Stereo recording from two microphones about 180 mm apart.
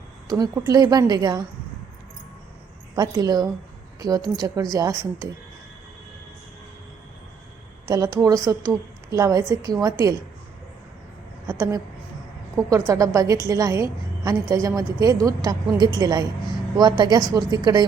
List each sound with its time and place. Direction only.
0.3 s a woman's voice: 20° right (ahead or behind)
2.9 s a woman's voice: 20° right (ahead or behind)
7.9 s a woman's voice: 20° right (ahead or behind)
11.5 s a sound: 20° right (ahead or behind)
12.5 s a woman's voice: 15° right (ahead or behind)